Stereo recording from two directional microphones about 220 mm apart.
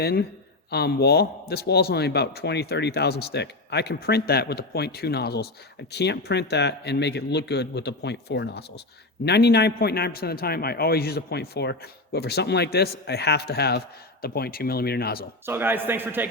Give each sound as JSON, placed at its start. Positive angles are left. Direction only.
{"t": 0.0, "sound": "a man's voice", "side_deg": 45}
{"t": 15.4, "sound": "a man's voice", "side_deg": -10}